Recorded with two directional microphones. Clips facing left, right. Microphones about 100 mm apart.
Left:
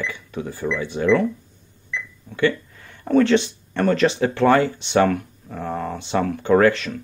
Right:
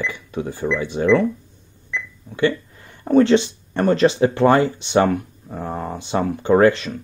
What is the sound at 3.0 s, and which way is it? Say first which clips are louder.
Speech: right 2 dB; 20° right (ahead or behind).